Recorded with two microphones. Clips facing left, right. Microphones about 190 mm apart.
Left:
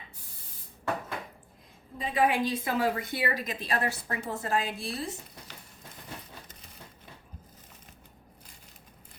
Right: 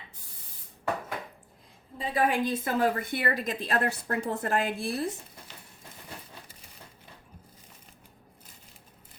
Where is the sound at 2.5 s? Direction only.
50° right (ahead or behind).